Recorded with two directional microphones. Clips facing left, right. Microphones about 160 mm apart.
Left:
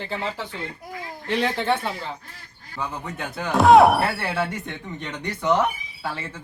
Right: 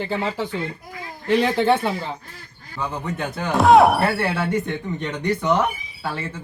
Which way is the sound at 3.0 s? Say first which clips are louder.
Right 4 dB; 5° left (ahead or behind).